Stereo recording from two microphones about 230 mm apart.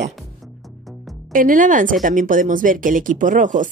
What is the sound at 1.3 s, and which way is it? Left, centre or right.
Speech, right.